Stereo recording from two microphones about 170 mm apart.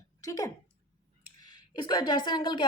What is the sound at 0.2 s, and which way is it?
A woman's voice, 20° left (ahead or behind).